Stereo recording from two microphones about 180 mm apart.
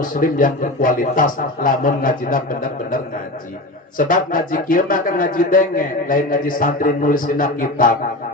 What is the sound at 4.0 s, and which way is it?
A man's voice, 50° left (ahead or behind).